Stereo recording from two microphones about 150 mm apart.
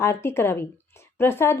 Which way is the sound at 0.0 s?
15° left (ahead or behind).